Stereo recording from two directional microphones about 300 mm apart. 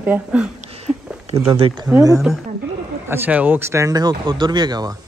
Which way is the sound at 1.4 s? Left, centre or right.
Centre.